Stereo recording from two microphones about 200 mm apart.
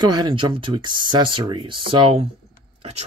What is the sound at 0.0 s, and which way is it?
Speech, 20° right (ahead or behind).